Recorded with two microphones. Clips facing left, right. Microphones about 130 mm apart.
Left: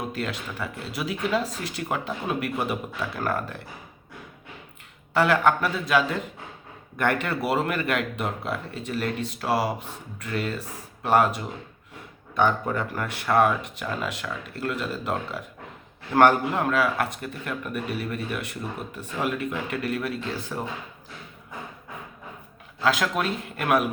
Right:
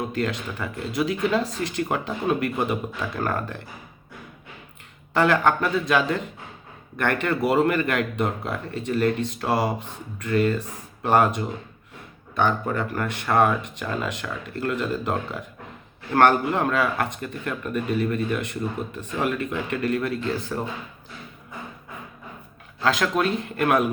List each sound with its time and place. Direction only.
0.1 s speech: 5° left (ahead or behind)
5.1 s speech: 5° left (ahead or behind)
22.8 s speech: 5° left (ahead or behind)